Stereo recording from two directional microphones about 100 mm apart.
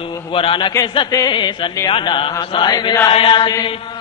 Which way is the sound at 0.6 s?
45° left (ahead or behind).